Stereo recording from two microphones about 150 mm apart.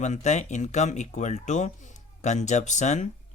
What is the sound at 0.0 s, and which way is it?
Speech, 50° left (ahead or behind).